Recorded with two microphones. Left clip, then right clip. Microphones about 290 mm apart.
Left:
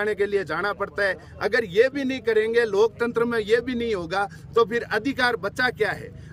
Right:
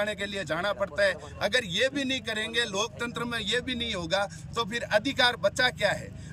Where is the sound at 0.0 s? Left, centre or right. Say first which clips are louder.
Left 7 dB; centre.